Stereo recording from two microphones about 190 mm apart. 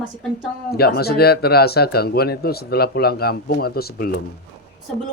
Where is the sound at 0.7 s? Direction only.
55° left (ahead or behind).